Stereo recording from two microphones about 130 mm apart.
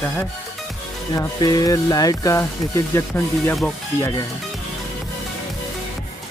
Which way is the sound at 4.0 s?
30° left (ahead or behind).